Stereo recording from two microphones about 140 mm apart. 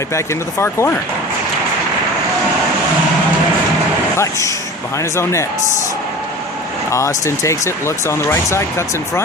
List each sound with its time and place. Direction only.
0.6 s speech: 20° left (ahead or behind)
4.2 s speech: 20° left (ahead or behind)
6.9 s speech: 20° left (ahead or behind)